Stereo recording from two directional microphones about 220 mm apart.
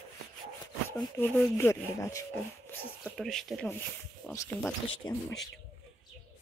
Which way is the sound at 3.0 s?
Centre (ahead or behind).